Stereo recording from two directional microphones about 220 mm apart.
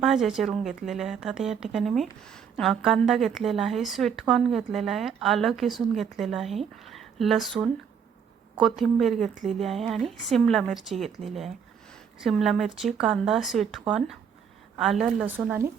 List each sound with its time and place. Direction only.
0.0 s speech: centre (ahead or behind)
9.3 s speech: 35° right (ahead or behind)
9.6 s speech: centre (ahead or behind)